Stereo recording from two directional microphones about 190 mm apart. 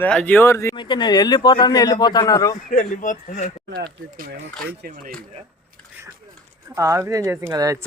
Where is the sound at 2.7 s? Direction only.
35° left (ahead or behind).